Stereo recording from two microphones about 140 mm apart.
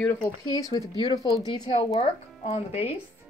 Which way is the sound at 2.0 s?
45° left (ahead or behind).